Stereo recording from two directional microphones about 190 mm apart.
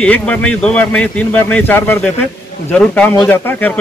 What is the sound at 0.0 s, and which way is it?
A man's voice, 5° left (ahead or behind).